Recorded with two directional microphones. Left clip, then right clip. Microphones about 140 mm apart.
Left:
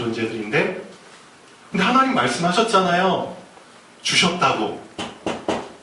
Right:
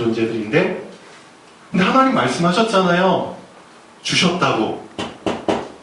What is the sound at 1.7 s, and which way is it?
A man's voice, 25° left (ahead or behind).